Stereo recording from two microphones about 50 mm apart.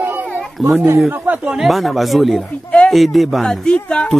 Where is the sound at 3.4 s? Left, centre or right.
Centre.